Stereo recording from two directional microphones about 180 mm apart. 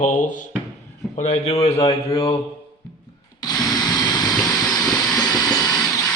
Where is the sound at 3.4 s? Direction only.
20° left (ahead or behind).